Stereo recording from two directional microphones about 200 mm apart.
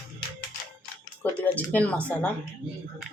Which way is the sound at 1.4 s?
10° left (ahead or behind).